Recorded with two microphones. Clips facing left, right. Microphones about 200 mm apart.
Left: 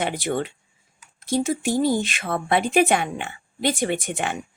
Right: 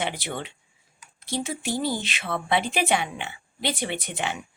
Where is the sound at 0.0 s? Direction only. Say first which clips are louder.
Left 6 dB; 50° left (ahead or behind).